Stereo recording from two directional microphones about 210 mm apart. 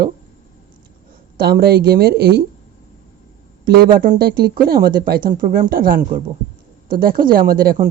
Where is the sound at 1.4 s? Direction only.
45° right (ahead or behind).